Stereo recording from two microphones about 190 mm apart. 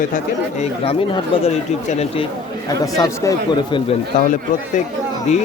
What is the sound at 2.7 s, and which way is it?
Speech, 20° left (ahead or behind).